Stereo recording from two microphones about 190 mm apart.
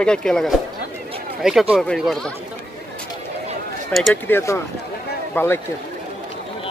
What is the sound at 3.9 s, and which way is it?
Speech, centre (ahead or behind).